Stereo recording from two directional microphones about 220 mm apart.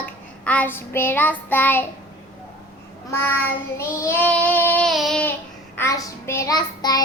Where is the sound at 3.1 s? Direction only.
10° left (ahead or behind).